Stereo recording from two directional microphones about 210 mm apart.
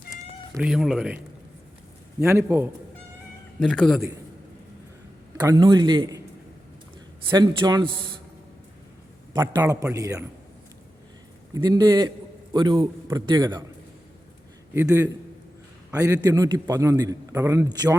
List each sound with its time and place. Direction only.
0.5 s speech: centre (ahead or behind)
2.2 s a man's voice: 10° right (ahead or behind)
3.6 s speech: centre (ahead or behind)
5.4 s a man's voice: 20° right (ahead or behind)
7.3 s a man's voice: 20° right (ahead or behind)
9.3 s a man's voice: 10° right (ahead or behind)
11.5 s a man's voice: 20° right (ahead or behind)
14.7 s a man's voice: 10° right (ahead or behind)